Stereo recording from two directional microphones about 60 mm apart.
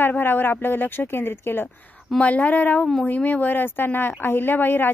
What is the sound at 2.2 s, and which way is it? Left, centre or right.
A woman's voice, left.